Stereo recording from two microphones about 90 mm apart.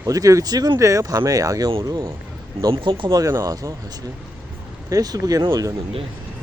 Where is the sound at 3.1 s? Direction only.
40° right (ahead or behind).